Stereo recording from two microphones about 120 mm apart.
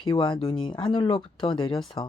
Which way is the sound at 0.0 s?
40° left (ahead or behind).